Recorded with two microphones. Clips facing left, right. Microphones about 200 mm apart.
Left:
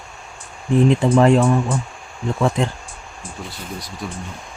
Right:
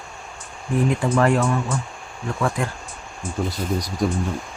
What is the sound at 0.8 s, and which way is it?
Speech, 20° left (ahead or behind).